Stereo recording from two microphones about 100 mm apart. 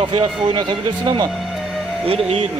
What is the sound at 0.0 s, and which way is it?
Speech, 55° right (ahead or behind).